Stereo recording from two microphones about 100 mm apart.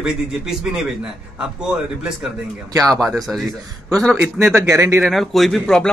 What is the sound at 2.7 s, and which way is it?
Speech, 35° right (ahead or behind).